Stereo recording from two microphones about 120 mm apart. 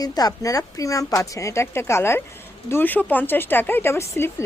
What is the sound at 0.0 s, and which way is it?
Speech, 30° left (ahead or behind).